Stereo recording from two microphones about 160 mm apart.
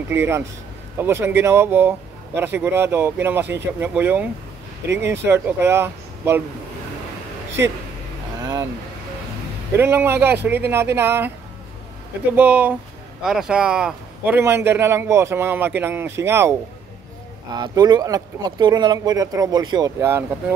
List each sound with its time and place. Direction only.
0.1 s a man's voice: 15° right (ahead or behind)
8.4 s vehicle: 25° right (ahead or behind)
9.8 s a man's voice: 15° right (ahead or behind)
12.4 s a man's voice: 10° right (ahead or behind)
17.6 s speech: 25° right (ahead or behind)